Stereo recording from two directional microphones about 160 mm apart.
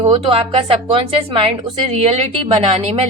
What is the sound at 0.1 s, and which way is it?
A woman's voice, 35° right (ahead or behind).